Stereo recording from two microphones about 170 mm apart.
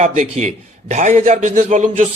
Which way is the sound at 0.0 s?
45° right (ahead or behind).